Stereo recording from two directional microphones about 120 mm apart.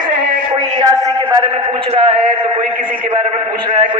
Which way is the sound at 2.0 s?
50° right (ahead or behind).